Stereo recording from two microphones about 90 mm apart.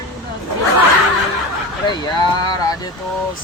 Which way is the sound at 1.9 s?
50° left (ahead or behind).